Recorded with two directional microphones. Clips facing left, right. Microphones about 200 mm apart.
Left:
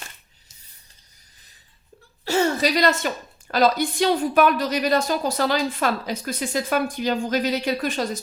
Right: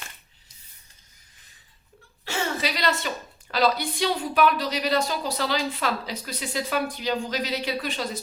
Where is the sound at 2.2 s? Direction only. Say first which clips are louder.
Left 8 dB; 40° left (ahead or behind).